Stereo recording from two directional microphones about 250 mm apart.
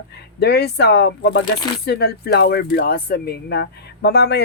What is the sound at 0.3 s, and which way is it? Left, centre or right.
Speech, left.